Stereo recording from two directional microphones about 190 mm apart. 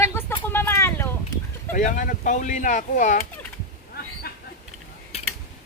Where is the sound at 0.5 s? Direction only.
10° left (ahead or behind).